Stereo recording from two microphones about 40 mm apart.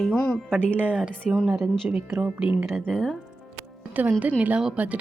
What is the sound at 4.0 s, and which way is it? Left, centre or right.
Speech, right.